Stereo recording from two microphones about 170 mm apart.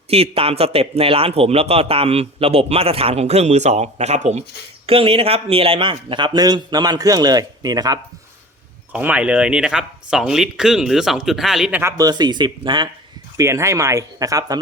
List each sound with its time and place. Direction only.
0.1 s a man's voice: 35° right (ahead or behind)
8.9 s speech: 10° right (ahead or behind)
11.8 s a man's voice: 20° right (ahead or behind)
13.3 s a man's voice: 15° right (ahead or behind)